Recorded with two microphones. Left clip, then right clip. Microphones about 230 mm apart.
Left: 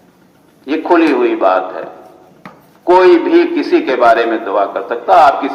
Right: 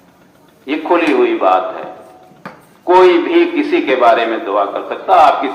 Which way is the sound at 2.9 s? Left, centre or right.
Left.